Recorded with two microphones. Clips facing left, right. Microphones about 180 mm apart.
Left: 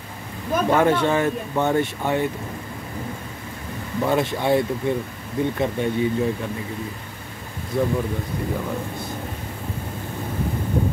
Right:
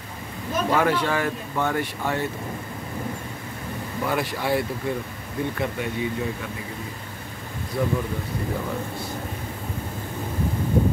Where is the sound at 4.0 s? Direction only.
25° left (ahead or behind).